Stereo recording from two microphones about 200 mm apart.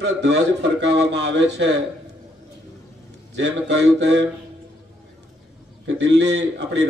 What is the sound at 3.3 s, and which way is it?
Speech, 60° right (ahead or behind).